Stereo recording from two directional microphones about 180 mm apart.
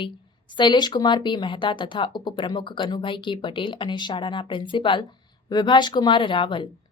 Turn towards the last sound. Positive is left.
turn(degrees=25)  # may be behind; listen again after turning